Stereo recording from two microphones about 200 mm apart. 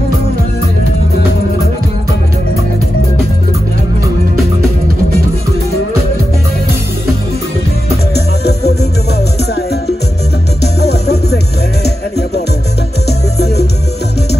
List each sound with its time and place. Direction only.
8.1 s music: 55° left (ahead or behind)
10.6 s music: 55° left (ahead or behind)
13.4 s music: 55° left (ahead or behind)